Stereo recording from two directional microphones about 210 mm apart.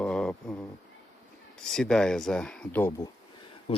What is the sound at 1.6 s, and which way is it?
Speech, 5° left (ahead or behind).